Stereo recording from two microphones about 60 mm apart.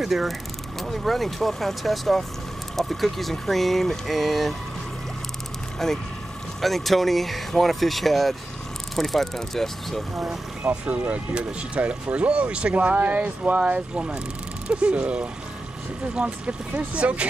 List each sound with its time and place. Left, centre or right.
0.0 s speech: centre
5.8 s speech: centre
10.6 s speech: right